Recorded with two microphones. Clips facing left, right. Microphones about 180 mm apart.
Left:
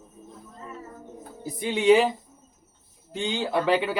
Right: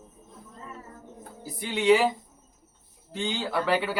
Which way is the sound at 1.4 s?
20° left (ahead or behind).